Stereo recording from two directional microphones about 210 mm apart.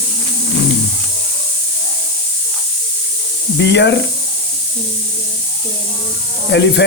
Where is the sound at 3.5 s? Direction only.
55° left (ahead or behind).